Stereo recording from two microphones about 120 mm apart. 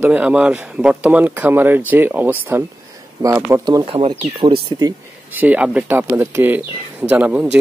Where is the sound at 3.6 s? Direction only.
30° right (ahead or behind).